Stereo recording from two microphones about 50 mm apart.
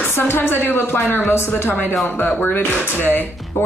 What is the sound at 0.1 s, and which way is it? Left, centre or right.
Speech, left.